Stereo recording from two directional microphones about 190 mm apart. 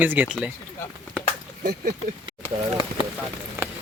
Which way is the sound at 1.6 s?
50° right (ahead or behind).